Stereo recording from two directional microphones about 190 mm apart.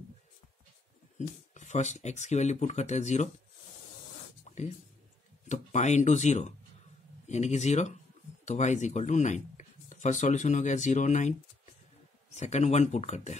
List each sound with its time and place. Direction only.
1.1 s speech: 40° left (ahead or behind)
4.5 s a sound: 35° left (ahead or behind)
5.5 s speech: 40° left (ahead or behind)
12.4 s speech: 35° left (ahead or behind)